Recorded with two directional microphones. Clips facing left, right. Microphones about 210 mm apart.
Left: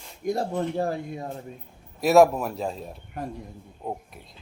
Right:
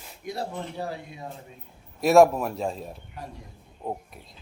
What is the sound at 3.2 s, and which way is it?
Speech, 50° left (ahead or behind).